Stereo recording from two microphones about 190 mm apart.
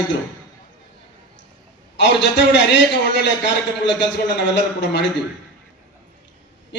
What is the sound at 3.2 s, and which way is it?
A man's voice, 70° left (ahead or behind).